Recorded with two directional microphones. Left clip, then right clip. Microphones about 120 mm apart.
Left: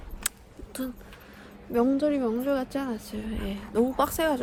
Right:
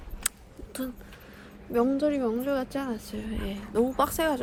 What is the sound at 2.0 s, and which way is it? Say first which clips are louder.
Speech: left 1 dB; 25° left (ahead or behind).